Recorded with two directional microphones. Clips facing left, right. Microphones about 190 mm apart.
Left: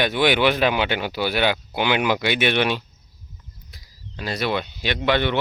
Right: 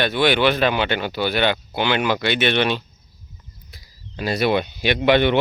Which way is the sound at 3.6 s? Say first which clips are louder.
Left 1 dB; 5° right (ahead or behind).